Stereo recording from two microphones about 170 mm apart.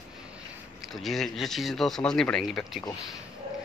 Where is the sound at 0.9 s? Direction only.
Centre (ahead or behind).